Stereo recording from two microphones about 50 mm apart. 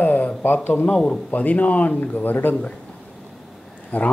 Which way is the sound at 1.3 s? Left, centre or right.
Left.